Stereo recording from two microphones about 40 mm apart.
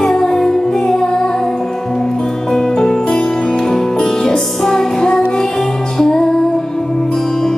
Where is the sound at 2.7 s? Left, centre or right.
Centre.